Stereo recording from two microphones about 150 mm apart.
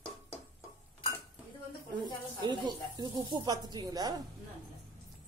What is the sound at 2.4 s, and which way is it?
Speech, 30° right (ahead or behind).